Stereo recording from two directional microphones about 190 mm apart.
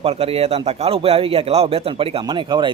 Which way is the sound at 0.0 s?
30° right (ahead or behind).